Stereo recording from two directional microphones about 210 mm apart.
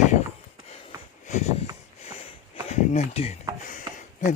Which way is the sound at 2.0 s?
25° left (ahead or behind).